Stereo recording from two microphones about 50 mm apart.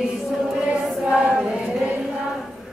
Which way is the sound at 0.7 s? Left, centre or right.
Right.